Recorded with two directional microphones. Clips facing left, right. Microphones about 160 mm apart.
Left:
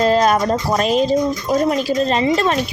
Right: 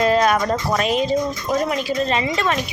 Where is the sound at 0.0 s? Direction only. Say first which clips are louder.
Left 2 dB; 30° left (ahead or behind).